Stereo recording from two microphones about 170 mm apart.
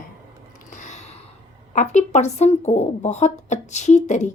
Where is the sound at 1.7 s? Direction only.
45° left (ahead or behind).